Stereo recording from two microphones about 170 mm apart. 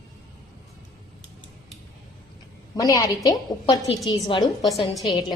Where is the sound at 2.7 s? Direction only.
20° left (ahead or behind).